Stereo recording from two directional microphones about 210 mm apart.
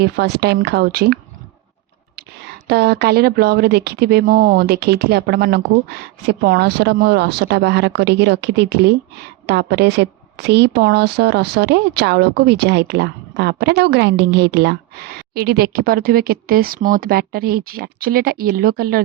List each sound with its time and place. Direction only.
0.0 s a woman's voice: 50° right (ahead or behind)